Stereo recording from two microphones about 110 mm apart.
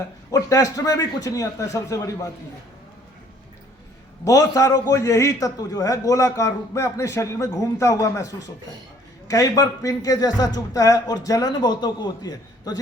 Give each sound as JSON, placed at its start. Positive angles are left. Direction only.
{"t": 0.3, "sound": "speech", "side_deg": 30}
{"t": 4.2, "sound": "a man's voice", "side_deg": 30}